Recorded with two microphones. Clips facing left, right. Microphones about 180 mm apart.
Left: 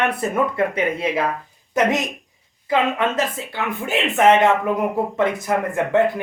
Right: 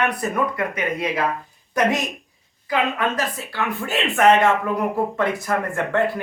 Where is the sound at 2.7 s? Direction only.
25° left (ahead or behind).